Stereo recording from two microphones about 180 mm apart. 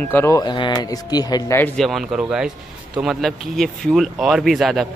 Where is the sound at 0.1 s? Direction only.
15° left (ahead or behind).